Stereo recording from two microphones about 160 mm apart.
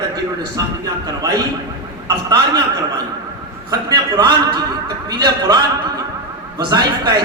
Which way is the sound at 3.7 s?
25° right (ahead or behind).